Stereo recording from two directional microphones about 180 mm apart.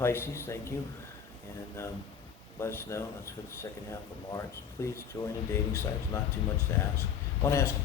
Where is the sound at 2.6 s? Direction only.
15° left (ahead or behind).